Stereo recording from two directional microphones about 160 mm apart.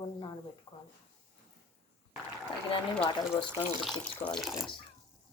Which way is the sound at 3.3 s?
30° left (ahead or behind).